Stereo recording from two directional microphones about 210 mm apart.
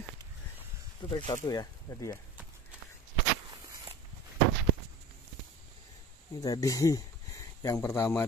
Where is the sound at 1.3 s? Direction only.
20° left (ahead or behind).